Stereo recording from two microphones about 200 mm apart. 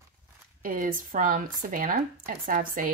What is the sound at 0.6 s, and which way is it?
Speech, 45° right (ahead or behind).